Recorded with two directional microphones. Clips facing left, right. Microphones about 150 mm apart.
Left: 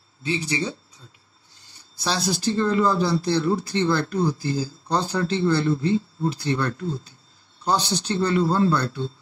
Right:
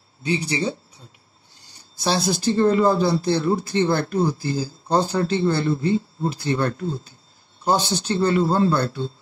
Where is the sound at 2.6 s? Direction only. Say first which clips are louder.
Right 4 dB; 50° right (ahead or behind).